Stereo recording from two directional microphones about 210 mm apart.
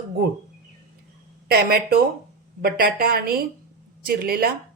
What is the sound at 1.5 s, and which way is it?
A woman's voice, 45° right (ahead or behind).